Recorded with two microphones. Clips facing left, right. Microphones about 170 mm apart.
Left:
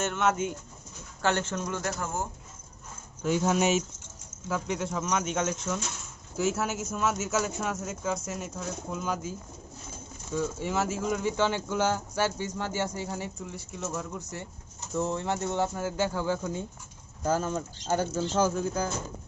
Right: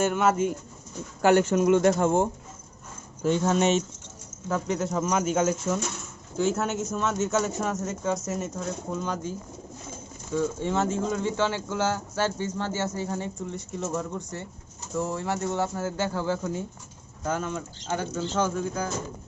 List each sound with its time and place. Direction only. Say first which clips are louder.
0.0 s speech: right 4 dB; 10° right (ahead or behind); by 2.3 s 25° right (ahead or behind)
3.2 s speech: right 3 dB; 10° left (ahead or behind)
10.3 s speech: right 3 dB; 10° left (ahead or behind)
14.3 s speech: right 3 dB; 15° left (ahead or behind)
17.2 s speech: left 2 dB; 35° left (ahead or behind)